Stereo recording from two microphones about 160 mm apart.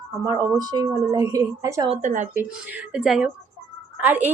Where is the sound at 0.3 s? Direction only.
20° right (ahead or behind).